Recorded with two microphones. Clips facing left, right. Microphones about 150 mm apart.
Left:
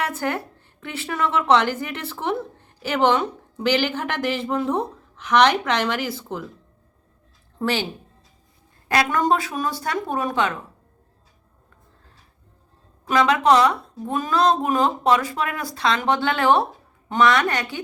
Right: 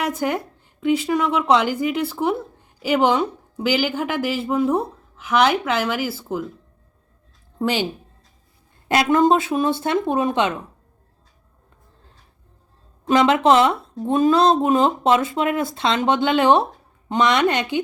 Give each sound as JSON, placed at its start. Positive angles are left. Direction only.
{"t": 0.0, "sound": "a woman's voice", "side_deg": -15}
{"t": 7.6, "sound": "a woman's voice", "side_deg": -15}
{"t": 8.9, "sound": "speech", "side_deg": -25}
{"t": 13.1, "sound": "speech", "side_deg": -25}